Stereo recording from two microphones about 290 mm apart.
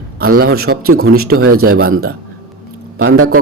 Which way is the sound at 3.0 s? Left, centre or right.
Right.